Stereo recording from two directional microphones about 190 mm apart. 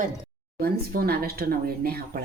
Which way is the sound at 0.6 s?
55° right (ahead or behind).